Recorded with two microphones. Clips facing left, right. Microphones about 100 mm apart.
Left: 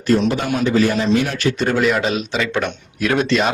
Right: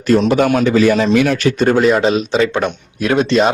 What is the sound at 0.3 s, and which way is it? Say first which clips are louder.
A man's voice: right 6 dB; 80° right.